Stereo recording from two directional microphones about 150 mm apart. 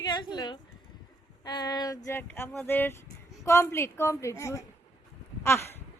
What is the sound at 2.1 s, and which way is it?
Speech, 15° left (ahead or behind).